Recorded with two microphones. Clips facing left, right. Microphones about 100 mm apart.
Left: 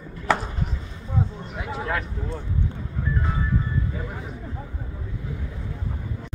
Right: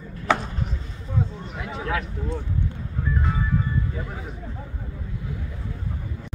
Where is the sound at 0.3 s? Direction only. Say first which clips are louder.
Even; centre (ahead or behind).